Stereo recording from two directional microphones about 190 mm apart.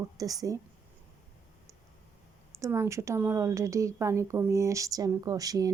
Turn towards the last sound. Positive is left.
turn(degrees=-20)  # may be behind; listen again after turning